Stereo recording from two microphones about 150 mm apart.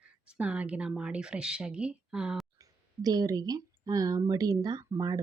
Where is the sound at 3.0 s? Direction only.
25° right (ahead or behind).